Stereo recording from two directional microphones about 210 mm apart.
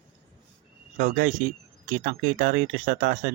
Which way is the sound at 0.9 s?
45° right (ahead or behind).